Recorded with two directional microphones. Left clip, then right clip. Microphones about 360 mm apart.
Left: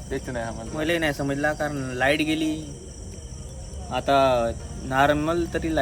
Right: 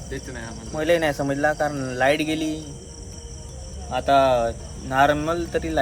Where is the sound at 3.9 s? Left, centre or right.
Centre.